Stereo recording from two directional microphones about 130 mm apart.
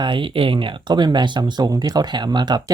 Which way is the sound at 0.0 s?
40° right (ahead or behind).